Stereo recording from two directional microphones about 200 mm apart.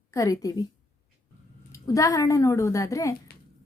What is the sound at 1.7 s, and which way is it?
A woman's voice, 15° left (ahead or behind).